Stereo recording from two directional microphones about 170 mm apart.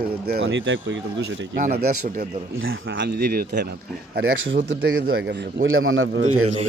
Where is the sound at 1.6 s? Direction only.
55° right (ahead or behind).